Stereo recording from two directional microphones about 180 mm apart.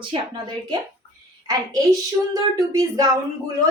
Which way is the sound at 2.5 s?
20° right (ahead or behind).